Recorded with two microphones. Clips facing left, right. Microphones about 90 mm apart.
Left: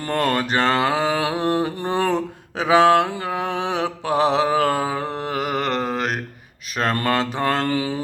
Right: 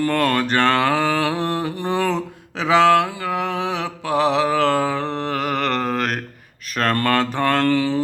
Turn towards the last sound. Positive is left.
turn(degrees=15)  # may be behind; listen again after turning